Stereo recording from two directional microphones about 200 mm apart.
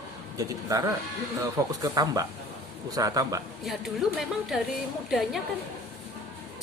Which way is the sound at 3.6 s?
Centre (ahead or behind).